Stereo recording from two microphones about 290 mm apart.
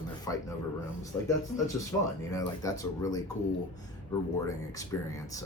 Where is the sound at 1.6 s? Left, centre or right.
Centre.